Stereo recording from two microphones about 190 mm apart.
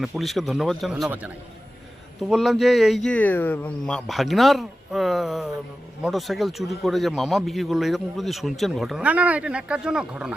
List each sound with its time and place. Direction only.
0.0 s a man's voice: centre (ahead or behind)
2.3 s a man's voice: centre (ahead or behind)